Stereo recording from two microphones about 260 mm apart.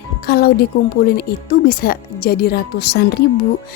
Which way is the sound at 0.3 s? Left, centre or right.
Left.